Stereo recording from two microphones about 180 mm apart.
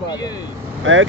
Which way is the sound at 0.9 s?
90° right.